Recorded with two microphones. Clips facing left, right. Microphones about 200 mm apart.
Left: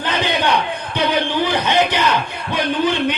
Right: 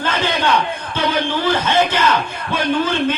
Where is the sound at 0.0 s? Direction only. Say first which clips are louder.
Even; 15° left (ahead or behind).